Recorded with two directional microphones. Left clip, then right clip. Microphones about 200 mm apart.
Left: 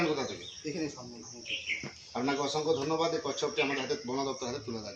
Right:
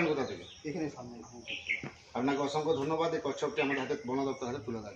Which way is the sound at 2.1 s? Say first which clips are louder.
Even; centre (ahead or behind).